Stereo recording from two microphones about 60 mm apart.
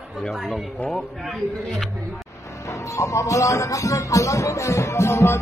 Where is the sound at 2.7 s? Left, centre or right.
Left.